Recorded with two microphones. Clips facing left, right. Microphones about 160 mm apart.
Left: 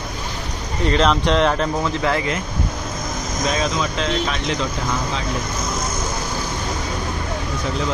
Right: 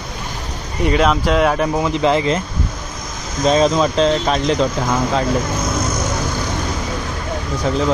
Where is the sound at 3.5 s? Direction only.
35° right (ahead or behind).